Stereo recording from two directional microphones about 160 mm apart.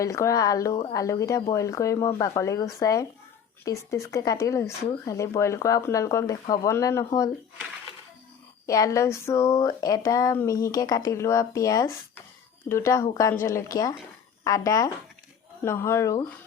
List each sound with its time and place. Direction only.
0.0 s speech: 20° left (ahead or behind)
8.6 s speech: 20° left (ahead or behind)